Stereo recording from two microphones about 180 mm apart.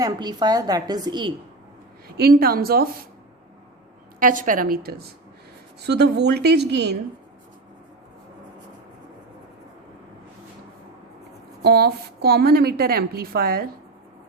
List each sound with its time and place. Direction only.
0.0 s a woman's voice: 20° right (ahead or behind)
2.0 s a woman's voice: 60° right (ahead or behind)
4.2 s a woman's voice: 50° right (ahead or behind); by 6.9 s 70° right (ahead or behind)
11.6 s a woman's voice: 60° right (ahead or behind)